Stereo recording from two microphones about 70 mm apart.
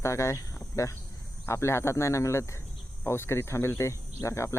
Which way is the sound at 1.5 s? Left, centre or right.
Left.